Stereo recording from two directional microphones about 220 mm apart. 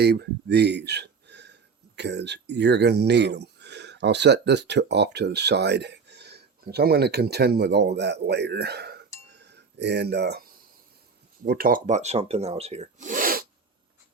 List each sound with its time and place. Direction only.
0.0 s speech: 50° right (ahead or behind)
11.4 s speech: 40° right (ahead or behind)